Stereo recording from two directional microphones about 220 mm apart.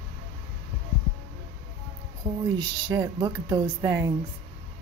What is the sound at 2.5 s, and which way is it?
A woman's voice, 20° right (ahead or behind).